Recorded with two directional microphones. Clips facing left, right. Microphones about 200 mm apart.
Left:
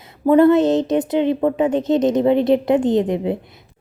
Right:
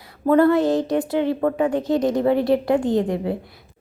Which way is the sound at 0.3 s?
20° left (ahead or behind).